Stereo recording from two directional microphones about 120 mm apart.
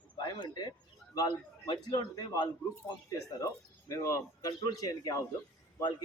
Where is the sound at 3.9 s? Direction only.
25° left (ahead or behind).